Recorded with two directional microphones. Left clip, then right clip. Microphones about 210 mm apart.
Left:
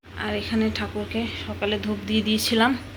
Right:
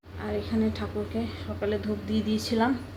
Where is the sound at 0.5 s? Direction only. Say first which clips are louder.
Left 3 dB; 15° left (ahead or behind).